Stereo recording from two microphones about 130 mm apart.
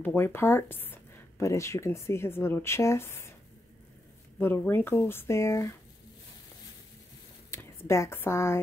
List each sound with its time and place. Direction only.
0.0 s speech: 15° left (ahead or behind)
4.4 s speech: 15° left (ahead or behind)
7.5 s speech: 20° left (ahead or behind)